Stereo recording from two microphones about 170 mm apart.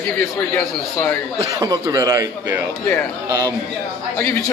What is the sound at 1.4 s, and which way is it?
Speech, 20° right (ahead or behind).